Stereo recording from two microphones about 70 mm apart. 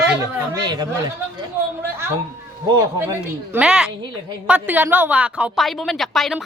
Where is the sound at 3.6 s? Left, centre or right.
Centre.